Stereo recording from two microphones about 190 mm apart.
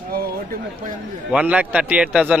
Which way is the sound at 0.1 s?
50° right (ahead or behind).